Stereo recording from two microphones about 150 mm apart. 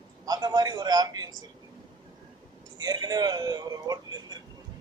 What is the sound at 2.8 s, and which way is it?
Speech, 25° right (ahead or behind).